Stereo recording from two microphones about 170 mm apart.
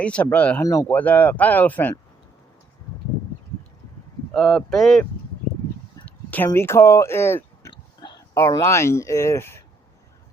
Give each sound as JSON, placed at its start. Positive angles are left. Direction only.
{"t": 0.0, "sound": "speech", "side_deg": 5}
{"t": 0.6, "sound": "speech", "side_deg": 20}
{"t": 4.4, "sound": "speech", "side_deg": 0}
{"t": 6.1, "sound": "speech", "side_deg": 10}